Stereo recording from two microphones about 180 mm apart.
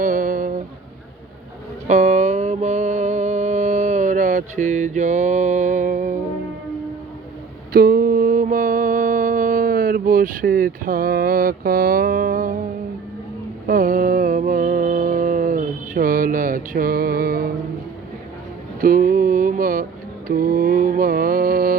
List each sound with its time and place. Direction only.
0.0 s a sound: 50° right (ahead or behind)
1.9 s mantra: 40° right (ahead or behind)
7.7 s mantra: 55° right (ahead or behind)
13.7 s mantra: 50° right (ahead or behind)
18.8 s mantra: 50° right (ahead or behind)